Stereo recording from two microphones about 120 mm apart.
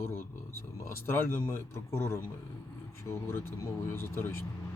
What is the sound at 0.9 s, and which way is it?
A man's voice, 20° left (ahead or behind).